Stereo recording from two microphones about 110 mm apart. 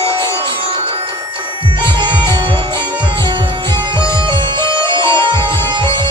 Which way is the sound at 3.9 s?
45° right (ahead or behind).